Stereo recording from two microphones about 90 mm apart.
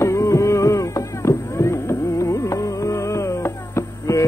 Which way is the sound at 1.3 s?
30° left (ahead or behind).